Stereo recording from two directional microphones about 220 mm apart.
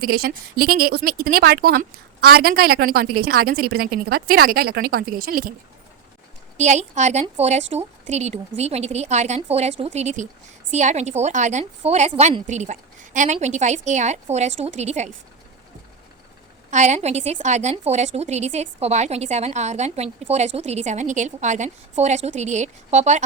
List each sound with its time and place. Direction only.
0.0 s a woman's voice: 45° right (ahead or behind)
6.6 s a woman's voice: 35° right (ahead or behind)
16.7 s a woman's voice: 30° right (ahead or behind)